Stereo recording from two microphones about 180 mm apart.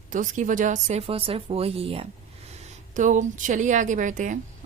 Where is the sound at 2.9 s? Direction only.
45° right (ahead or behind).